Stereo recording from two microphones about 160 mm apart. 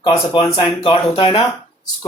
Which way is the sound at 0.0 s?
25° left (ahead or behind).